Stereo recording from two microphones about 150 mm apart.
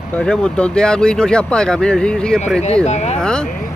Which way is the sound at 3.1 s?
5° left (ahead or behind).